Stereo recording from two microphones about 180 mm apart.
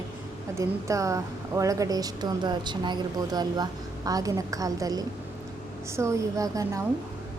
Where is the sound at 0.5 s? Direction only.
15° right (ahead or behind).